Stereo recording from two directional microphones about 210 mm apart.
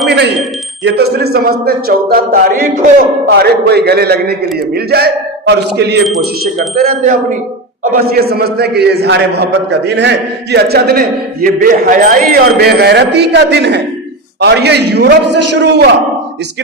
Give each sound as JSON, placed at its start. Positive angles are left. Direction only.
{"t": 0.9, "sound": "a man's voice", "side_deg": -50}
{"t": 7.0, "sound": "a man's voice", "side_deg": -35}